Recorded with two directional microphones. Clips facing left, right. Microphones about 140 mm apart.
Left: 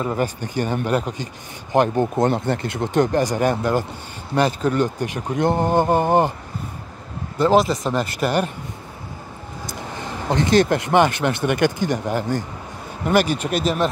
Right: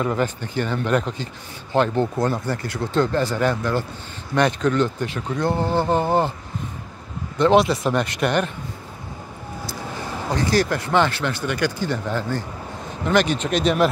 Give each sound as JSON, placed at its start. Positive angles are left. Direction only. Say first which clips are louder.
{"t": 0.0, "sound": "a man's voice", "louder": "even", "side_deg": 15}
{"t": 7.3, "sound": "speech", "louder": "even", "side_deg": 5}
{"t": 10.3, "sound": "a man's voice", "louder": "left 4 dB", "side_deg": 20}